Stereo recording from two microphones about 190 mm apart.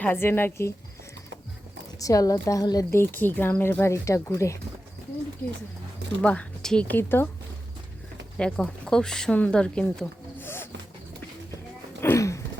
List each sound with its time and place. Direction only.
0.0 s speech: 10° left (ahead or behind)
2.0 s speech: 15° left (ahead or behind)
6.2 s speech: 5° left (ahead or behind)
8.4 s speech: 5° left (ahead or behind)
11.9 s a sound: 15° left (ahead or behind)